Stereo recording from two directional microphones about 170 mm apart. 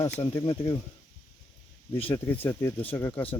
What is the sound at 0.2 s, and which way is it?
Speech, 25° left (ahead or behind).